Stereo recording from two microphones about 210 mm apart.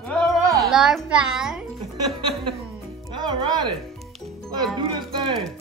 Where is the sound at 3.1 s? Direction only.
20° right (ahead or behind).